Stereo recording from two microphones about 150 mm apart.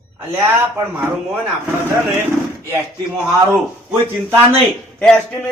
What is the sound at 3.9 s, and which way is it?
Speech, 15° right (ahead or behind).